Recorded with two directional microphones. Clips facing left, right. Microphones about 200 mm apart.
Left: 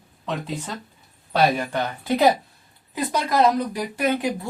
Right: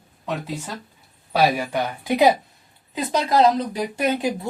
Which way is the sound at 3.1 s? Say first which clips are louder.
Right 2 dB; 25° right (ahead or behind).